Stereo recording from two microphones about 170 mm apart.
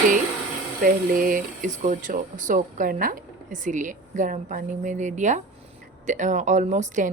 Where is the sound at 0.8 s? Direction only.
55° right (ahead or behind).